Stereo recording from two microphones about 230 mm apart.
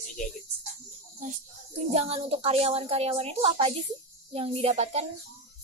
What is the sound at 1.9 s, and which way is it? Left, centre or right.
A woman's voice, right.